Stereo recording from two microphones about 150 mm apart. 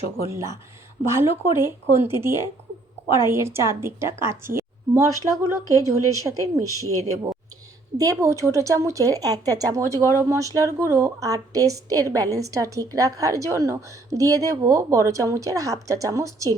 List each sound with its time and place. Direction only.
0.3 s a woman's voice: 20° right (ahead or behind)
7.9 s speech: 20° right (ahead or behind)